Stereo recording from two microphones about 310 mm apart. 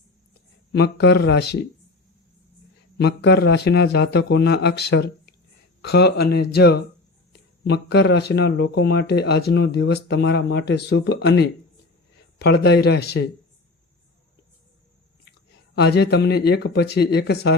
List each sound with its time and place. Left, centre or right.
0.7 s speech: left
3.0 s speech: left
15.7 s speech: left